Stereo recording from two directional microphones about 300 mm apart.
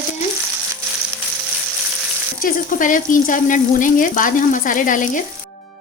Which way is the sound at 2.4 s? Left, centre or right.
Left.